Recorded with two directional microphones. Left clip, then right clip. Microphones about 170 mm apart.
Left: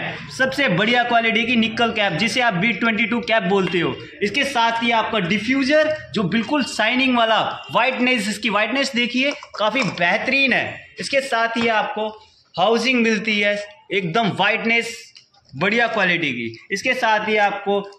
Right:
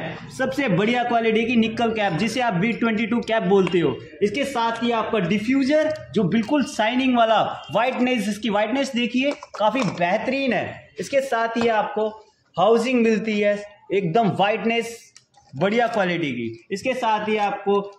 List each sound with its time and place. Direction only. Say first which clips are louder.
0.1 s a man's voice: left 5 dB; 5° right (ahead or behind)
4.6 s a man's voice: left 5 dB; centre (ahead or behind)
6.1 s a man's voice: left 1 dB; 15° right (ahead or behind)
8.9 s a man's voice: left 3 dB; 5° right (ahead or behind); by 11.1 s 35° right (ahead or behind)
11.1 s a man's voice: left 2 dB; 20° right (ahead or behind)
13.1 s a man's voice: left 2 dB; 30° right (ahead or behind)
16.9 s a man's voice: left 4 dB; centre (ahead or behind)